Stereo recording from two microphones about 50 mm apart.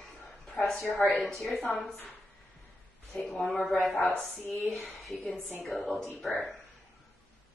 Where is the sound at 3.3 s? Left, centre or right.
Centre.